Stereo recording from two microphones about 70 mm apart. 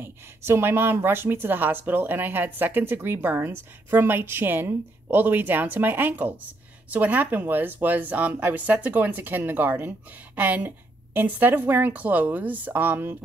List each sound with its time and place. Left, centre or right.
0.0 s speech: right